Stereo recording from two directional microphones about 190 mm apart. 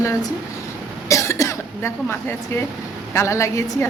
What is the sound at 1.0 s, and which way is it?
Cough, 15° left (ahead or behind).